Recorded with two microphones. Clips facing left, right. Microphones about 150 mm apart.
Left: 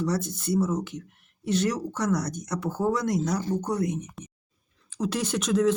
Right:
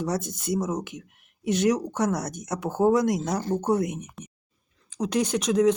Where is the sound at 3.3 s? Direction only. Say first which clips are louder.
Right 1 dB; 50° right (ahead or behind).